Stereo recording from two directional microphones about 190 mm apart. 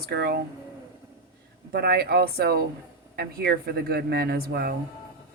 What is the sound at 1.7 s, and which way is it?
Speech, 55° right (ahead or behind).